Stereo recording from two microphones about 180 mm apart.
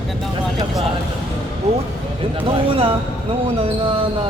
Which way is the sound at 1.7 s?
35° right (ahead or behind).